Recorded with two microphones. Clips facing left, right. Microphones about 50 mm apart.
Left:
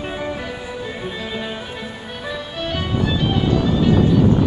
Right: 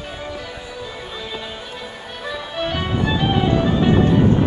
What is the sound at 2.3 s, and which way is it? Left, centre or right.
Music, centre.